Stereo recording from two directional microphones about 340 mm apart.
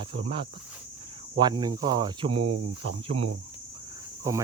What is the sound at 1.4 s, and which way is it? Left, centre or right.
Speech, centre.